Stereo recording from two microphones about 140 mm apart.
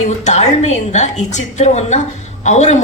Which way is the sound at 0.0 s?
55° left (ahead or behind).